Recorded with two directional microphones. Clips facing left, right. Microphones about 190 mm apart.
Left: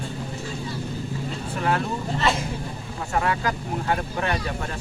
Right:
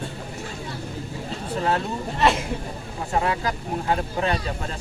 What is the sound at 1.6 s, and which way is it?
Speech, 30° right (ahead or behind).